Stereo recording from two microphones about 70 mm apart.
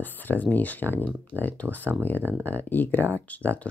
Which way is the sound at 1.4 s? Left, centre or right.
Left.